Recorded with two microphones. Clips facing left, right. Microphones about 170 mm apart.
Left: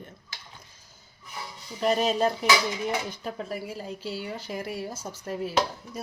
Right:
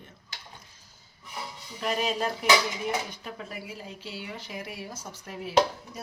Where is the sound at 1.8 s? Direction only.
35° left (ahead or behind).